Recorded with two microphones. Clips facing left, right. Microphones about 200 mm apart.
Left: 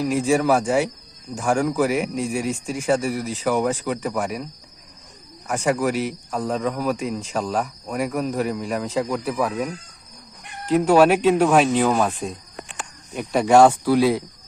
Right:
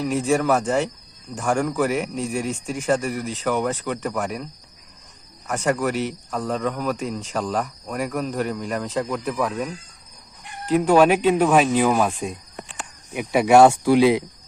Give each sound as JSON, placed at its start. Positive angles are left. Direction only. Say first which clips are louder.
{"t": 0.0, "sound": "speech", "louder": "left 1 dB", "side_deg": 5}
{"t": 5.5, "sound": "speech", "louder": "left 1 dB", "side_deg": 10}